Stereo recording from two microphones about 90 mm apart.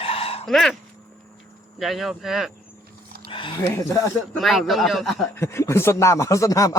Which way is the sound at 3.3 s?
70° left (ahead or behind).